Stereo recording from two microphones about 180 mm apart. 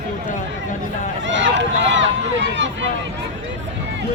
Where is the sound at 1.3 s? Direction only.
90° right.